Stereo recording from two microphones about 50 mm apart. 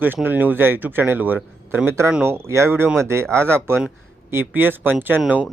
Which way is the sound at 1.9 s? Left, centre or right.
Right.